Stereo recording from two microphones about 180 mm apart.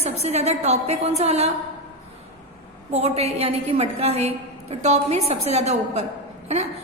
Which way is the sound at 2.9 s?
35° right (ahead or behind).